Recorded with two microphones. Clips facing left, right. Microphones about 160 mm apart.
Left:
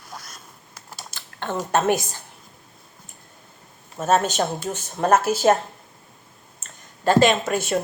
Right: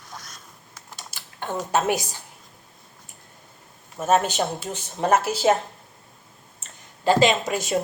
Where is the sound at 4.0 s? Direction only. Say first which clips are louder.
Left 1 dB; 15° right (ahead or behind).